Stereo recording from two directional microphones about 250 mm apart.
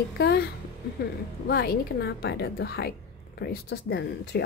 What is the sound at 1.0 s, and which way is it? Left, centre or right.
A woman's voice, left.